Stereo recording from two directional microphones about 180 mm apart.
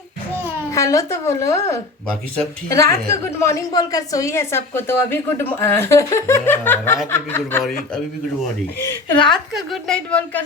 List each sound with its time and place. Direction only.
0.7 s a woman's voice: 15° left (ahead or behind)
2.0 s a woman's voice: 5° left (ahead or behind)
2.7 s a woman's voice: 15° left (ahead or behind)
9.2 s a woman's voice: centre (ahead or behind)